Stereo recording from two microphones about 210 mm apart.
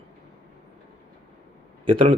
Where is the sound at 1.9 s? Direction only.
25° right (ahead or behind).